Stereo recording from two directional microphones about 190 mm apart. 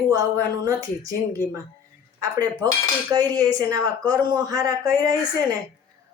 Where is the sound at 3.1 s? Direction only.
20° right (ahead or behind).